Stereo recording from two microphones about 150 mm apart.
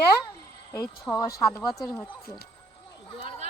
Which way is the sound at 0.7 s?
25° left (ahead or behind).